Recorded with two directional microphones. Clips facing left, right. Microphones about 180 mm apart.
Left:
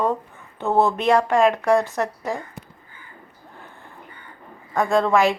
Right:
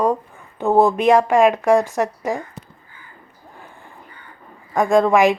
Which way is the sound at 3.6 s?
15° right (ahead or behind).